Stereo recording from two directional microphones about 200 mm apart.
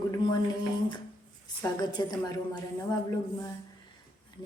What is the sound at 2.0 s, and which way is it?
Speech, 20° left (ahead or behind).